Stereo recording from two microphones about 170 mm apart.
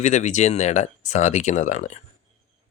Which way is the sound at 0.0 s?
45° left (ahead or behind).